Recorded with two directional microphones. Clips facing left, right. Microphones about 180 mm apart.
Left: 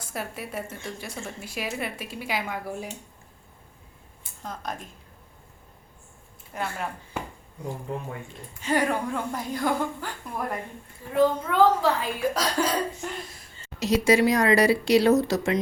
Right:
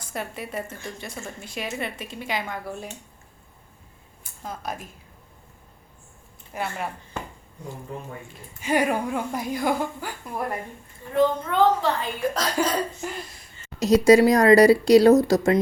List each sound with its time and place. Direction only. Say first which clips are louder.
0.1 s speech: right 2 dB; centre (ahead or behind)
4.4 s speech: right 2 dB; 5° right (ahead or behind)
6.5 s speech: right 1 dB; 5° right (ahead or behind)
7.1 s a sound: left 1 dB; 10° left (ahead or behind)
8.6 s speech: right 2 dB; 15° right (ahead or behind)
11.1 s speech: right 1 dB; 5° left (ahead or behind)
13.7 s speech: right 6 dB; 40° right (ahead or behind)